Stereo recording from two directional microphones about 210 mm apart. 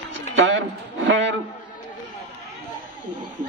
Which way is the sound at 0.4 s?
65° right (ahead or behind).